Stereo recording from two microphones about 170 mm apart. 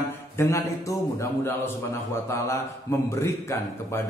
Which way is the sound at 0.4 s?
15° left (ahead or behind).